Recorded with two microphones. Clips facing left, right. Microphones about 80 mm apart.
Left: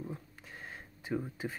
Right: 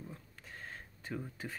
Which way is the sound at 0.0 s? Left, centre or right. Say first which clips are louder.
Left 6 dB; centre.